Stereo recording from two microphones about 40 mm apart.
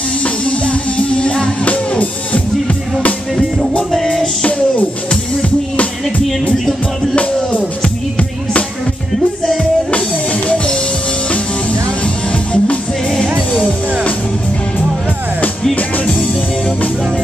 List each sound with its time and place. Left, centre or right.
0.2 s music: left
1.7 s music: left
5.1 s music: left
7.2 s music: left
9.8 s music: left